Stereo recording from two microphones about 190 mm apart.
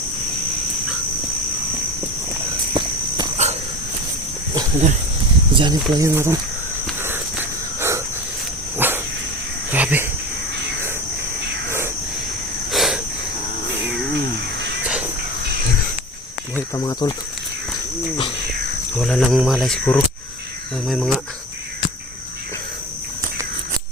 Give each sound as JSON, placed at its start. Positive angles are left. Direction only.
{"t": 3.4, "sound": "cricket", "side_deg": -35}
{"t": 5.5, "sound": "speech", "side_deg": -20}
{"t": 7.8, "sound": "cricket", "side_deg": -15}
{"t": 8.8, "sound": "dog", "side_deg": -10}
{"t": 9.7, "sound": "cricket", "side_deg": -10}
{"t": 12.7, "sound": "cricket", "side_deg": 0}
{"t": 16.7, "sound": "speech", "side_deg": 20}
{"t": 18.9, "sound": "speech", "side_deg": 5}